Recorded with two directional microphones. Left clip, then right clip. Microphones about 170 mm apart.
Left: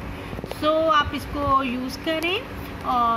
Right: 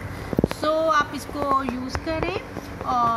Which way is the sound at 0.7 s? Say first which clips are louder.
Left 3 dB; 10° left (ahead or behind).